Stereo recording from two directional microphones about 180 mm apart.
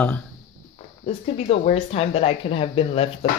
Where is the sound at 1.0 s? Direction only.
35° left (ahead or behind).